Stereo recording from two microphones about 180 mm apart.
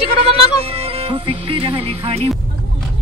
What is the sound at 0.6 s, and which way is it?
Music, 35° right (ahead or behind).